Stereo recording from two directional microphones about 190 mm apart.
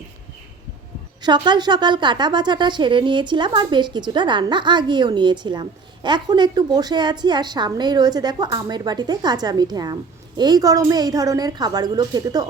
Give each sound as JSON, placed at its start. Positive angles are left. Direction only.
{"t": 1.2, "sound": "a woman's voice", "side_deg": -20}